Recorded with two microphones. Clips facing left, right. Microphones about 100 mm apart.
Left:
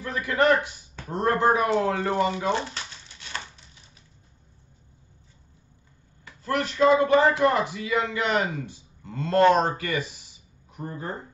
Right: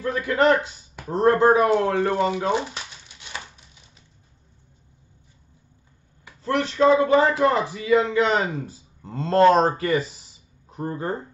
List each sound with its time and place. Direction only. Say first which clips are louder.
0.1 s speech: right 2 dB; 25° right (ahead or behind)
2.1 s crumpling: right 2 dB; 20° right (ahead or behind)
6.4 s speech: right 2 dB; 30° right (ahead or behind)
10.8 s speech: right 6 dB; 50° right (ahead or behind)